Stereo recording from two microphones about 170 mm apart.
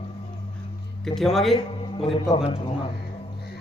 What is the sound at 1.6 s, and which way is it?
A man's voice, 30° left (ahead or behind).